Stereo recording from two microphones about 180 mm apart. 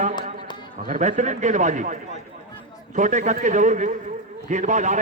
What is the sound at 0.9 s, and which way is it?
A man's voice, 45° right (ahead or behind).